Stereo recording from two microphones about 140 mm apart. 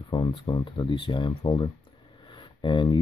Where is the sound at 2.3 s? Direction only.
35° left (ahead or behind).